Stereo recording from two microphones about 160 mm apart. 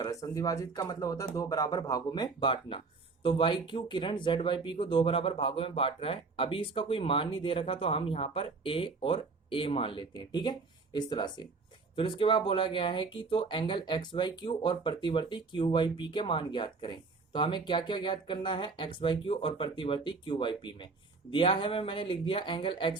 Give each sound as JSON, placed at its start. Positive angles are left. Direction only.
{"t": 0.0, "sound": "speech", "side_deg": 20}